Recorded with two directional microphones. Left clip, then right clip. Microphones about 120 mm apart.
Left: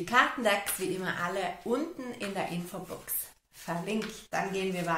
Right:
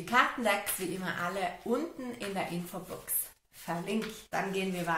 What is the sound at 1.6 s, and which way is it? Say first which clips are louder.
Speech: left 1 dB; 30° left (ahead or behind).